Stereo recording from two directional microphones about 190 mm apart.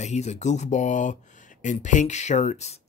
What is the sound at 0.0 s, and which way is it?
Speech, 35° left (ahead or behind).